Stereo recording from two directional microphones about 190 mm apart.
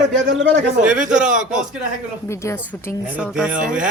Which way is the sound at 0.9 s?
40° right (ahead or behind).